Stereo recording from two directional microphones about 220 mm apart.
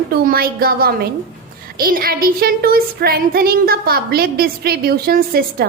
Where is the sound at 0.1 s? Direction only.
45° right (ahead or behind).